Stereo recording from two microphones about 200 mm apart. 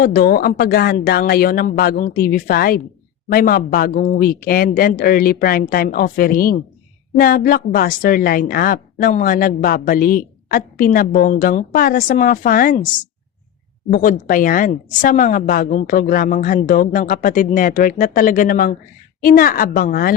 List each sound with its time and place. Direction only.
0.0 s a woman's voice: 45° left (ahead or behind)